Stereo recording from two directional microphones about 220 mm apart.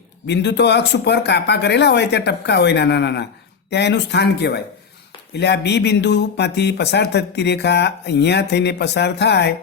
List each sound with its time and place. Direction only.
0.3 s speech: 50° left (ahead or behind)